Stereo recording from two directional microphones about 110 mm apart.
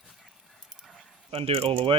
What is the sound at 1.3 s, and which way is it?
Speech, 55° right (ahead or behind).